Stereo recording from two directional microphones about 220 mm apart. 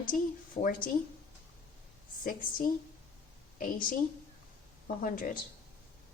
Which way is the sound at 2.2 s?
40° left (ahead or behind).